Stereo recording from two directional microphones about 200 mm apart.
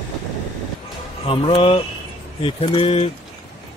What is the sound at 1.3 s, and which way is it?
Speech, 25° left (ahead or behind).